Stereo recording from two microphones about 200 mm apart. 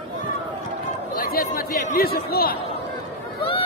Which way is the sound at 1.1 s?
45° left (ahead or behind).